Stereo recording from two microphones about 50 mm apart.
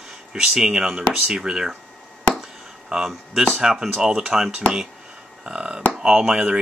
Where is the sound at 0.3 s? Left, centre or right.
Centre.